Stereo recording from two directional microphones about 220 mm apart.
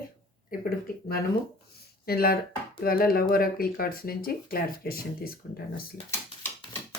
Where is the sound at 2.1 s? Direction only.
45° left (ahead or behind).